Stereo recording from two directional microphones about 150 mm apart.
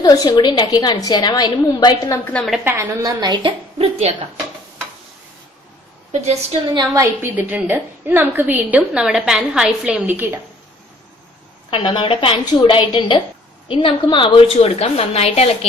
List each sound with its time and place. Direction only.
0.0 s a woman's voice: 25° left (ahead or behind)
2.2 s a woman's voice: 5° left (ahead or behind)
2.6 s a woman's voice: 15° right (ahead or behind)
3.0 s a woman's voice: 30° right (ahead or behind)
6.1 s a woman's voice: 45° right (ahead or behind)
6.7 s a woman's voice: 25° right (ahead or behind)
11.7 s a woman's voice: 35° left (ahead or behind)